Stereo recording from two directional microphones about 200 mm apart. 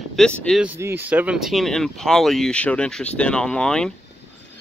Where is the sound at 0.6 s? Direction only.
10° right (ahead or behind).